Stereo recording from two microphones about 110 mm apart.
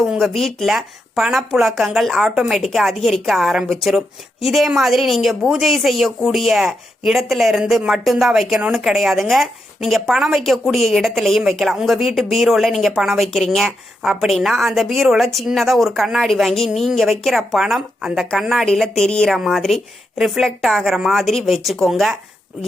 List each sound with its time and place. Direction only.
0.0 s speech: centre (ahead or behind)